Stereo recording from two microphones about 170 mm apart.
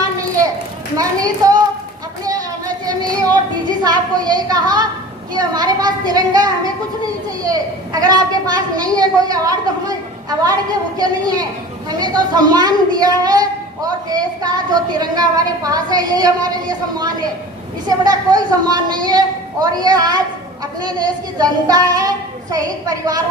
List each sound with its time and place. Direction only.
0.9 s a child's voice: 20° right (ahead or behind)
3.8 s a woman's voice: 25° right (ahead or behind)
21.3 s a child's voice: 20° right (ahead or behind)